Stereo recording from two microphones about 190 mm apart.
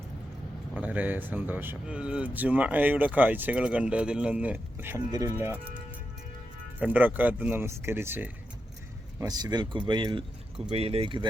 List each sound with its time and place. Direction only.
0.7 s speech: 10° right (ahead or behind)
6.7 s speech: 10° right (ahead or behind); by 11.3 s 25° right (ahead or behind)